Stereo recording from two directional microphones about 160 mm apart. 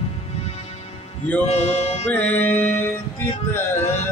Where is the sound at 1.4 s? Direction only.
40° left (ahead or behind).